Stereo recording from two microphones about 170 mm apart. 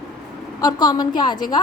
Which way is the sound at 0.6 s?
25° left (ahead or behind).